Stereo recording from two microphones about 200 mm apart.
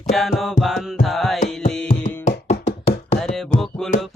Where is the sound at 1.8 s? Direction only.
40° left (ahead or behind).